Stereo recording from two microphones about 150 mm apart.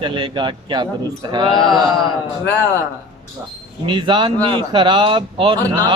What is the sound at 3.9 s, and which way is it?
Speech, 30° right (ahead or behind).